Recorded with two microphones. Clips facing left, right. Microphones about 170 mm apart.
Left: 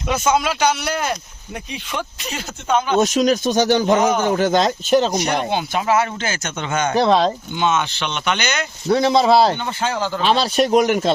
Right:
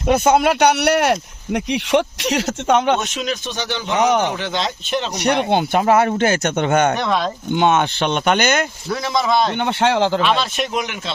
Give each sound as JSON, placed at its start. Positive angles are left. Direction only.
{"t": 0.1, "sound": "speech", "side_deg": -60}
{"t": 3.0, "sound": "speech", "side_deg": 40}
{"t": 5.2, "sound": "speech", "side_deg": -60}
{"t": 6.9, "sound": "speech", "side_deg": 30}
{"t": 7.5, "sound": "speech", "side_deg": -55}
{"t": 8.9, "sound": "speech", "side_deg": 30}
{"t": 9.6, "sound": "speech", "side_deg": -70}
{"t": 10.2, "sound": "speech", "side_deg": 35}